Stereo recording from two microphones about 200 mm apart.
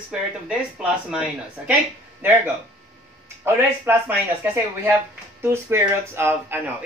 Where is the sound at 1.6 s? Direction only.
10° right (ahead or behind).